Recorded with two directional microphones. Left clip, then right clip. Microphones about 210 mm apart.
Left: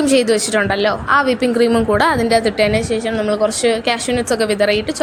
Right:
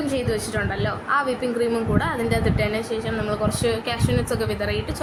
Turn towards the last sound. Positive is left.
turn(degrees=40)  # may be behind; listen again after turning